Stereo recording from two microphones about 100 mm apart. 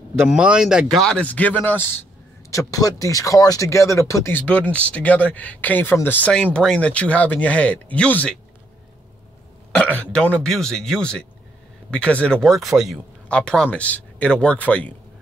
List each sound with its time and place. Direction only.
0.2 s speech: 10° right (ahead or behind); by 2.0 s 20° left (ahead or behind)
2.5 s speech: 35° left (ahead or behind); by 8.4 s 10° left (ahead or behind)
10.1 s speech: 10° left (ahead or behind)
13.3 s speech: 10° left (ahead or behind)